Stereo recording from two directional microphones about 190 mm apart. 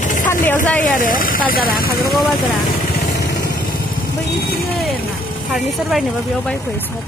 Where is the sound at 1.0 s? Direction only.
45° left (ahead or behind).